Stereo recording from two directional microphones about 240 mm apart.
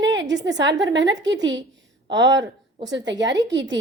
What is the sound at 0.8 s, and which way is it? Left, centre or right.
A woman's voice, right.